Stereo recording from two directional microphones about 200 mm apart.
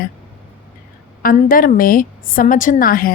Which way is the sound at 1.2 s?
45° left (ahead or behind).